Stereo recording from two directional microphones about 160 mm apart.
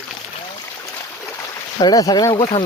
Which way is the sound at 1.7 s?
25° left (ahead or behind).